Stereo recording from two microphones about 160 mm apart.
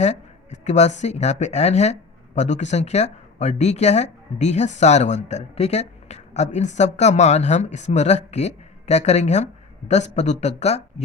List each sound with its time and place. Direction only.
0.0 s speech: 45° left (ahead or behind)